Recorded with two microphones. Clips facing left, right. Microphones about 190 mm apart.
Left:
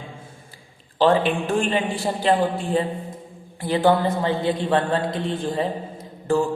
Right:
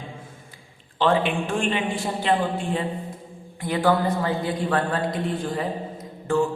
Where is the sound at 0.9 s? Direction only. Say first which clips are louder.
Left 3 dB; 35° left (ahead or behind).